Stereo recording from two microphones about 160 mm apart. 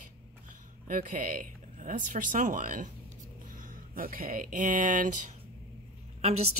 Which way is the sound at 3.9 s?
65° right (ahead or behind).